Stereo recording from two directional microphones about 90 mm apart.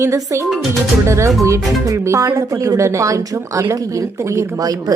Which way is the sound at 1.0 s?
30° right (ahead or behind).